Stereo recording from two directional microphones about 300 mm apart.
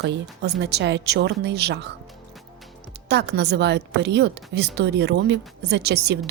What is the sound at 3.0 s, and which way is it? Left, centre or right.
A woman's voice, right.